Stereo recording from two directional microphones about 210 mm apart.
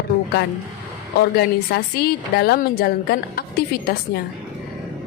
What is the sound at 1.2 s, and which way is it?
Speech, 50° left (ahead or behind).